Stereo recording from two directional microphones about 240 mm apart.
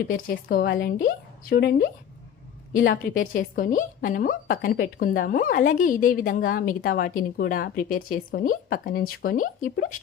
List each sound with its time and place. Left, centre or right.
0.1 s a woman's voice: left